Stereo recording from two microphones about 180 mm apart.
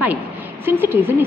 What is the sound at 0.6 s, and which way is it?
Speech, 10° right (ahead or behind).